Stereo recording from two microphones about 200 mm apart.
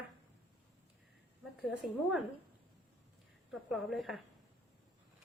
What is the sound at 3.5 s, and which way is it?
Speech, centre (ahead or behind).